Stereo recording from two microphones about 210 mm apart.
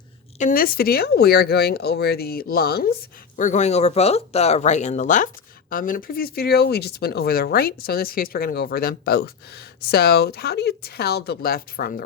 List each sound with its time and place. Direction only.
0.3 s speech: 40° left (ahead or behind)
3.3 s speech: 35° left (ahead or behind)